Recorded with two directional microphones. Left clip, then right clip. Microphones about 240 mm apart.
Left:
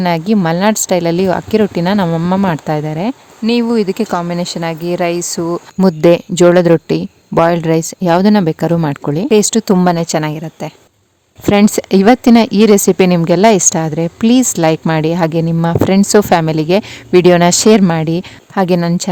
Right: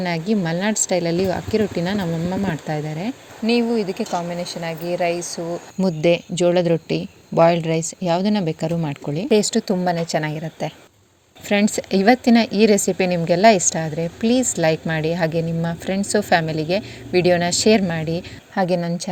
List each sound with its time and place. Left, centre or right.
0.0 s a woman's voice: left